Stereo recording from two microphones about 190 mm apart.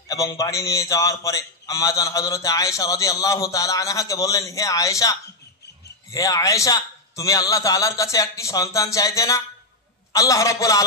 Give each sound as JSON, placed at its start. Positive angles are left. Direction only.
{"t": 0.1, "sound": "a man's voice", "side_deg": 15}